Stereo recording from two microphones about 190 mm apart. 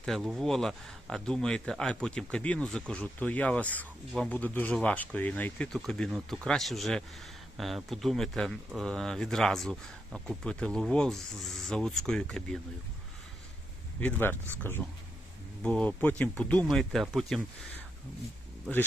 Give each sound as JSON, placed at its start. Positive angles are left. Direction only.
{"t": 0.0, "sound": "speech", "side_deg": 0}
{"t": 14.0, "sound": "a man's voice", "side_deg": 10}
{"t": 14.8, "sound": "speech", "side_deg": -5}